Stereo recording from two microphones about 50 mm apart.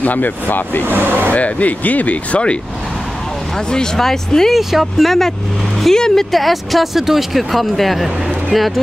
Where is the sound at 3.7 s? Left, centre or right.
Centre.